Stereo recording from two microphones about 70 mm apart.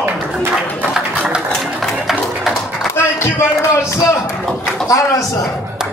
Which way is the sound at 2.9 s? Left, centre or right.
Left.